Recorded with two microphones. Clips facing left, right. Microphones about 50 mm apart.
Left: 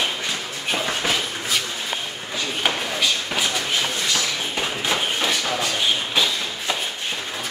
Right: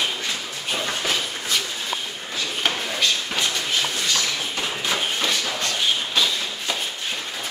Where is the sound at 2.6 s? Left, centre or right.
Centre.